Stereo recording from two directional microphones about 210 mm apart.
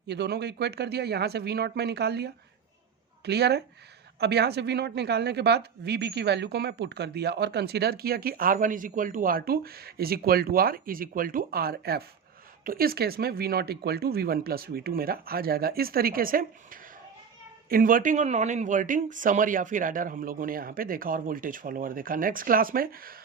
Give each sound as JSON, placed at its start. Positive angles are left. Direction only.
{"t": 0.1, "sound": "speech", "side_deg": -55}
{"t": 17.7, "sound": "speech", "side_deg": -40}